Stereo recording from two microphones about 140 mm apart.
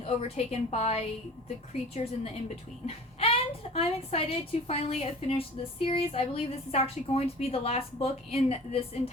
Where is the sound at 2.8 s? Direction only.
45° left (ahead or behind).